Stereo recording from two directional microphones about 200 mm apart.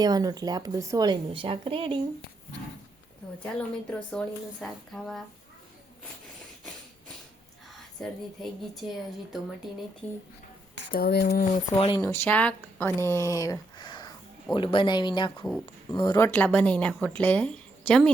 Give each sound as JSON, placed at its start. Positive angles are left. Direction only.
{"t": 0.0, "sound": "speech", "side_deg": -20}
{"t": 3.4, "sound": "a woman's voice", "side_deg": 5}
{"t": 7.9, "sound": "a woman's voice", "side_deg": 0}
{"t": 10.0, "sound": "speech", "side_deg": 5}
{"t": 10.9, "sound": "speech", "side_deg": 55}
{"t": 11.8, "sound": "speech", "side_deg": 20}